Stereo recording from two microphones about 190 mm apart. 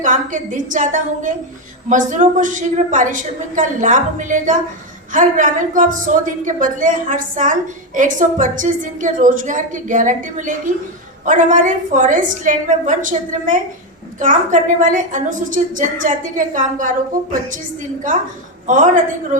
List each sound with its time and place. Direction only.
0.0 s a woman's voice: 40° right (ahead or behind)
19.3 s a woman's voice: 40° right (ahead or behind)